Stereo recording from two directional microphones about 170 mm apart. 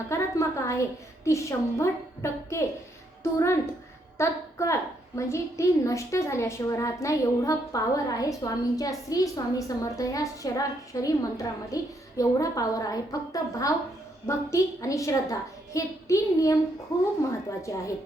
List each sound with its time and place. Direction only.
0.1 s a woman's voice: 15° left (ahead or behind)